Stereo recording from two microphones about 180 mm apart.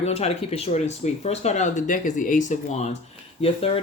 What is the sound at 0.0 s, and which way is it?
Speech, 35° left (ahead or behind).